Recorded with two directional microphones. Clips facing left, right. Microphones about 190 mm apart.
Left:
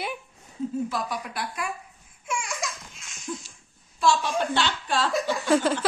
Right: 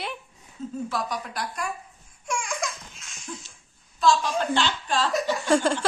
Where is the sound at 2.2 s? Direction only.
Centre (ahead or behind).